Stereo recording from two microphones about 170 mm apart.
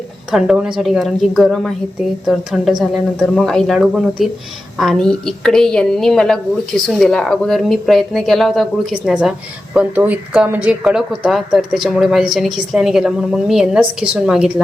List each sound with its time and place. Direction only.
0.3 s a woman's voice: 5° right (ahead or behind)